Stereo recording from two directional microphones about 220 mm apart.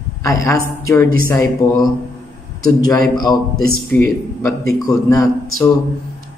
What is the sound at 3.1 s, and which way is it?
Speech, 20° left (ahead or behind).